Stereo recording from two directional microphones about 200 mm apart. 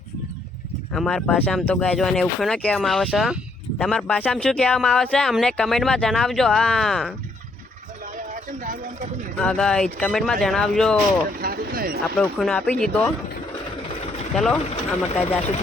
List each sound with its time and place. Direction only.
0.9 s speech: 5° left (ahead or behind)
9.4 s speech: 5° left (ahead or behind)
11.3 s a sound: 50° right (ahead or behind)
12.4 s speech: 5° left (ahead or behind)
14.3 s speech: centre (ahead or behind)
14.7 s speech: 30° left (ahead or behind)